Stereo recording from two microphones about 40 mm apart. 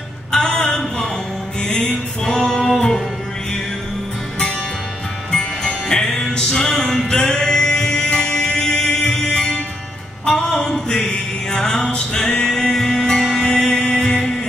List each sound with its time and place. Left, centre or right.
0.3 s a sound: centre
1.6 s music: left
5.3 s music: centre